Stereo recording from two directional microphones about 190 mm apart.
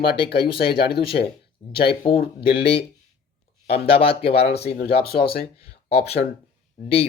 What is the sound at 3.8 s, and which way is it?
Speech, 30° left (ahead or behind).